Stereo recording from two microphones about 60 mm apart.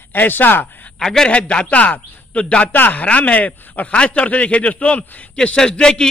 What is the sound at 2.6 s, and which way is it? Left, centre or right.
A man's voice, left.